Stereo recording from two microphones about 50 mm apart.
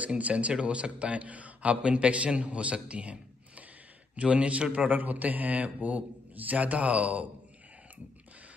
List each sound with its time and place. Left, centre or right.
0.0 s a man's voice: right